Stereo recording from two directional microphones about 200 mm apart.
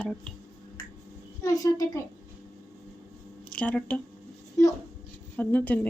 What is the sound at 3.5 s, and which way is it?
Speech, 5° left (ahead or behind).